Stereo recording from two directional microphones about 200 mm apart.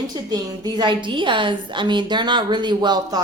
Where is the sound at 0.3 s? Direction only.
20° right (ahead or behind).